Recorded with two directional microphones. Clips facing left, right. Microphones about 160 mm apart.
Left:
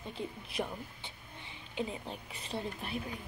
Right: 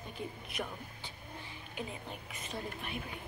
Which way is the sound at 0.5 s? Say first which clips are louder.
Left 4 dB; 30° left (ahead or behind).